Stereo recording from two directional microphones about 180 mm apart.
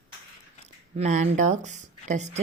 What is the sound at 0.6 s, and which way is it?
Speech, 40° right (ahead or behind).